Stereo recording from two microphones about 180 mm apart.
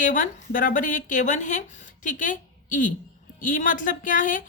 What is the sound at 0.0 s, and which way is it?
A woman's voice, 50° left (ahead or behind).